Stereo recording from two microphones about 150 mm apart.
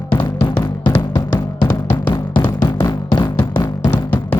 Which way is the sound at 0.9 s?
15° left (ahead or behind).